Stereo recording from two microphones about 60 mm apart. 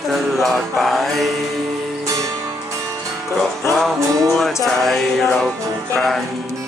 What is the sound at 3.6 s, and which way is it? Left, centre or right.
Music, left.